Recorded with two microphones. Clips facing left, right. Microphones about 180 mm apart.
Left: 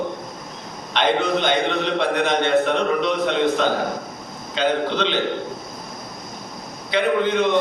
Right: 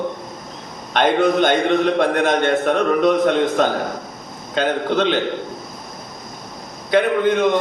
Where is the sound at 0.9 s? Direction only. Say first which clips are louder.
Right 4 dB; 50° right (ahead or behind).